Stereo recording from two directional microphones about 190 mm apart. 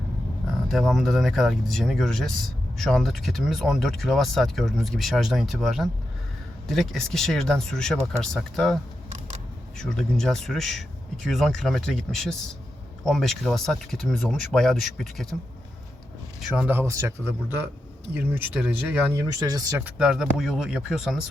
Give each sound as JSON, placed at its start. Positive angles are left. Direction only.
{"t": 0.7, "sound": "speech", "side_deg": 0}
{"t": 16.4, "sound": "speech", "side_deg": -5}
{"t": 19.8, "sound": "speech", "side_deg": -5}